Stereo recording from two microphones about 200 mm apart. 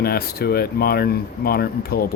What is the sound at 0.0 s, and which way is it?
Speech, 50° left (ahead or behind).